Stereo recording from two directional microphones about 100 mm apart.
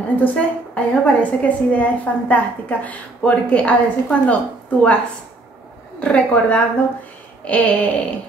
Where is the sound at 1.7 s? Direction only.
15° left (ahead or behind).